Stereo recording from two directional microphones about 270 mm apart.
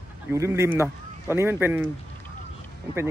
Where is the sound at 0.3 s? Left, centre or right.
Centre.